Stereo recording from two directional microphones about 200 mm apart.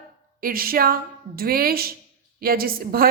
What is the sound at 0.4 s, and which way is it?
A woman's voice, 45° right (ahead or behind).